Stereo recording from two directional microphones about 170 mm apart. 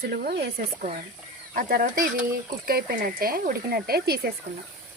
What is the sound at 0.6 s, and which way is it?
Speech, 50° right (ahead or behind).